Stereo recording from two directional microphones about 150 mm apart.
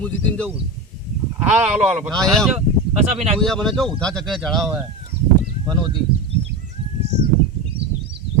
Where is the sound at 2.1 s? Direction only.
5° left (ahead or behind).